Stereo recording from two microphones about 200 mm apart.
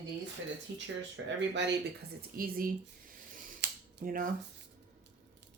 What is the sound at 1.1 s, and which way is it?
Speech, 60° right (ahead or behind).